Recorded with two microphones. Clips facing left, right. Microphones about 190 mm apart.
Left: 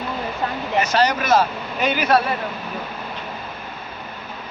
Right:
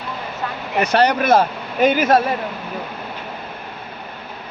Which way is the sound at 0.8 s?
60° right (ahead or behind).